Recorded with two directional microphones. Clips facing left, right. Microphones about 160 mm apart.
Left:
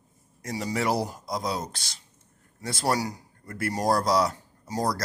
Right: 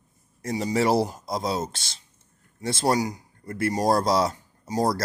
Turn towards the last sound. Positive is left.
turn(degrees=-25)  # may be behind; listen again after turning